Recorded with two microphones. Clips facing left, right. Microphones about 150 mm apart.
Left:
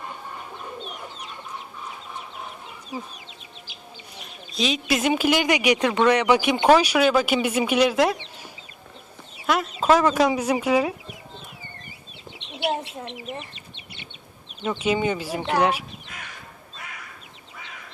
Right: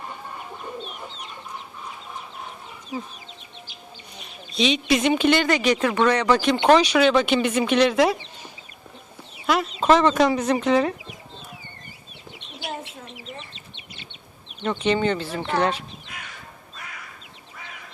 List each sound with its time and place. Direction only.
4.2 s speech: centre (ahead or behind)
9.5 s speech: 5° left (ahead or behind)
12.5 s bird: 70° left (ahead or behind)
14.6 s speech: 5° left (ahead or behind)